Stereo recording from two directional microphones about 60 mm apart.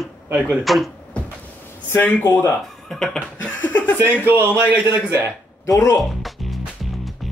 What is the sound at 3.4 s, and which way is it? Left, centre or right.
Chuckle, left.